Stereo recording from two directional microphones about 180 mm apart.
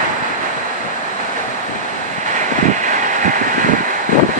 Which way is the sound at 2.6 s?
45° right (ahead or behind).